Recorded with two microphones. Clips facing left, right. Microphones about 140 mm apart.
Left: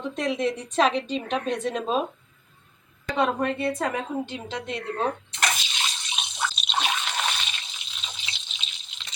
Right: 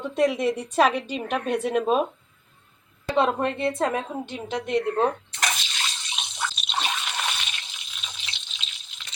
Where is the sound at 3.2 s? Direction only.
25° right (ahead or behind).